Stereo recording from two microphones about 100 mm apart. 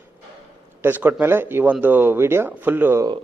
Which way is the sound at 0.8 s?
20° right (ahead or behind).